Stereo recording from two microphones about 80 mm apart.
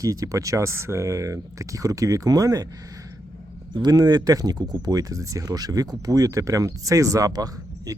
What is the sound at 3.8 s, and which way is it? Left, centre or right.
Speech, right.